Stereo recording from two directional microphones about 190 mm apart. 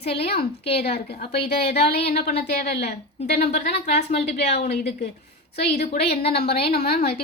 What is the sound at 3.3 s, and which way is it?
A woman's voice, 35° left (ahead or behind).